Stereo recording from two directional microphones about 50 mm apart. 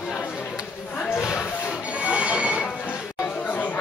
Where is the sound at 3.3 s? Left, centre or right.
Left.